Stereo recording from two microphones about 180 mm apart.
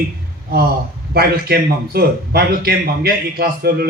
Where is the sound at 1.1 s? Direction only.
60° right (ahead or behind).